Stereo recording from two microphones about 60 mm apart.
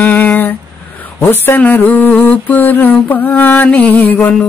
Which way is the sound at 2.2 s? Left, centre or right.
Left.